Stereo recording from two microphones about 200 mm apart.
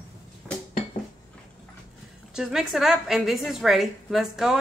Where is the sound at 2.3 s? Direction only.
Centre (ahead or behind).